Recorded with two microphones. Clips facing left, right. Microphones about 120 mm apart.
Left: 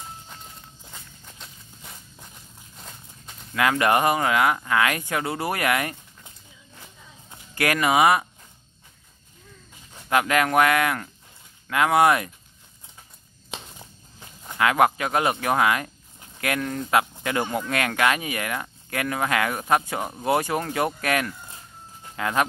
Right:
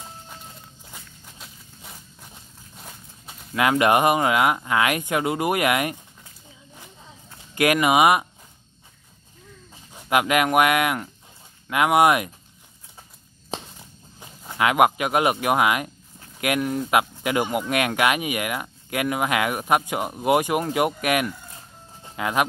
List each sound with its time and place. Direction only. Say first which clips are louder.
1.2 s walk: right 1 dB; 5° right (ahead or behind)
3.5 s speech: right 2 dB; 20° right (ahead or behind)
7.5 s speech: right 2 dB; 20° right (ahead or behind)
9.9 s speech: right 1 dB; 20° right (ahead or behind)
13.5 s a sound: right 6 dB; 35° right (ahead or behind)
14.6 s speech: right 1 dB; 20° right (ahead or behind)
22.0 s a sound: right 1 dB; 15° right (ahead or behind)